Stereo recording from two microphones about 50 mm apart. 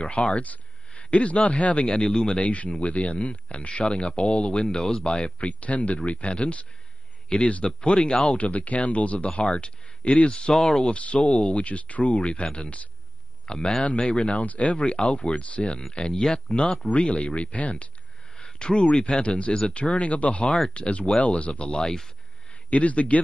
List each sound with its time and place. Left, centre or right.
0.0 s speech: left
1.9 s speech: centre
8.4 s speech: left
10.5 s speech: centre
10.9 s speech: left
14.4 s speech: left
18.3 s speech: centre
22.7 s speech: left